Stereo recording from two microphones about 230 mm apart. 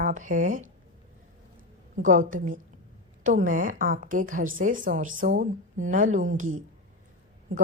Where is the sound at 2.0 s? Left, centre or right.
Right.